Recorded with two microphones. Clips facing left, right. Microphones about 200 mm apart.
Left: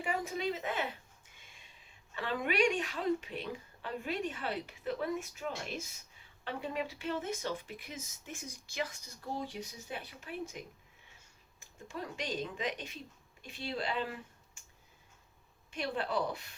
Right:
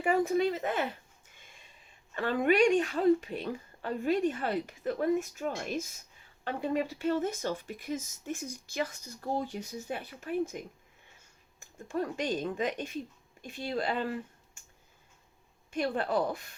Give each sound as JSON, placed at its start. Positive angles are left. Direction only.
{"t": 0.0, "sound": "speech", "side_deg": -50}
{"t": 2.1, "sound": "speech", "side_deg": -50}
{"t": 11.9, "sound": "speech", "side_deg": -45}
{"t": 15.7, "sound": "speech", "side_deg": -45}